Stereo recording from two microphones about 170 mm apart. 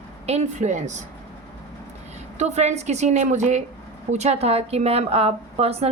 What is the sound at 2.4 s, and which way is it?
A woman's voice, 40° right (ahead or behind).